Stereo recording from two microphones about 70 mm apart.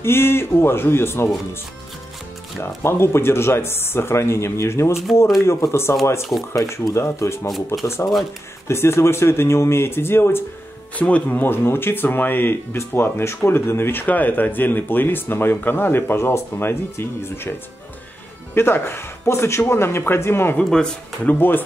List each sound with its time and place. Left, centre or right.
0.0 s speech: left
2.6 s speech: left
7.4 s speech: centre
7.8 s speech: left
11.0 s speech: left
20.5 s speech: centre
21.3 s speech: left